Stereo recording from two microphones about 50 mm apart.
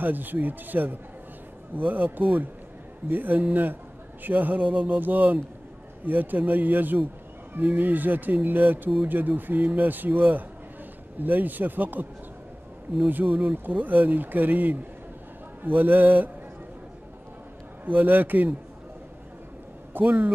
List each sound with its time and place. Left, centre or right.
0.0 s speech: right
13.1 s speech: right
17.8 s speech: right
19.9 s a man's voice: right